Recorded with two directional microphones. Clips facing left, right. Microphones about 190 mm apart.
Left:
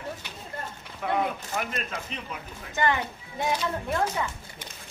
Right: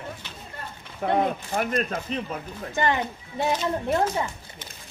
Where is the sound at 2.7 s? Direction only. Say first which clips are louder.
Right 2 dB; 20° right (ahead or behind).